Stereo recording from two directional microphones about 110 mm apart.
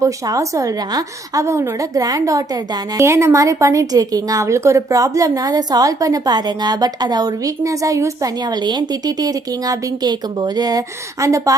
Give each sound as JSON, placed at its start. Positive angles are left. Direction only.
{"t": 0.0, "sound": "a woman's voice", "side_deg": -30}